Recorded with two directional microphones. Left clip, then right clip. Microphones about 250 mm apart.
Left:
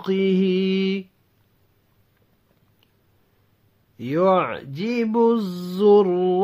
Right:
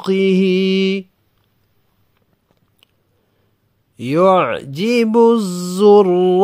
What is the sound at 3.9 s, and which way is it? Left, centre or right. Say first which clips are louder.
Speech: right 6 dB; right.